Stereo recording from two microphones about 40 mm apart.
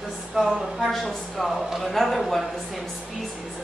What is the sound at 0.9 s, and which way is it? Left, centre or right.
A woman's voice, centre.